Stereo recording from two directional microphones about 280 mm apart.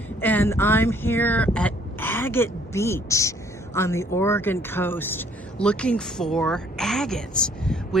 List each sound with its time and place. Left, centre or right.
0.2 s speech: centre